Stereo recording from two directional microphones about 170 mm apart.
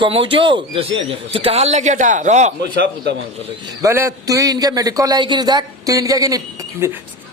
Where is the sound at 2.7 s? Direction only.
85° right.